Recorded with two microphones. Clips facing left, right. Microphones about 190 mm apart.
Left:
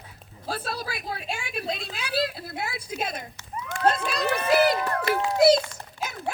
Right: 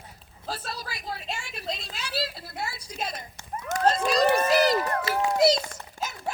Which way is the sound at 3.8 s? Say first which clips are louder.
Right 2 dB; 60° left (ahead or behind).